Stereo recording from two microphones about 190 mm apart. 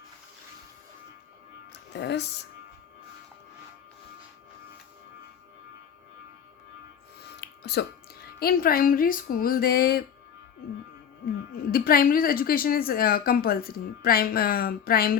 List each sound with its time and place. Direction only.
1.9 s speech: 65° left (ahead or behind)
7.4 s music: 60° left (ahead or behind)
8.4 s a woman's voice: 50° left (ahead or behind)
11.7 s a woman's voice: 50° left (ahead or behind)